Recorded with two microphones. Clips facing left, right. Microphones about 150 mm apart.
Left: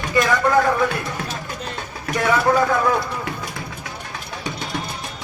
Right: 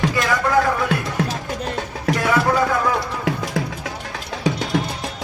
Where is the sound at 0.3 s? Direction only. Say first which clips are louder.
Left 1 dB; centre (ahead or behind).